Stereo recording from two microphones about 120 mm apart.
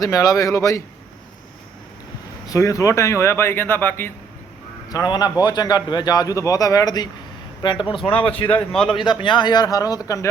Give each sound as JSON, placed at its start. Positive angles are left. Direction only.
{"t": 0.0, "sound": "speech", "side_deg": 30}
{"t": 2.5, "sound": "speech", "side_deg": 25}
{"t": 4.9, "sound": "a man's voice", "side_deg": 35}
{"t": 8.0, "sound": "speech", "side_deg": 15}
{"t": 8.7, "sound": "a man's voice", "side_deg": 5}
{"t": 9.2, "sound": "a man's voice", "side_deg": 40}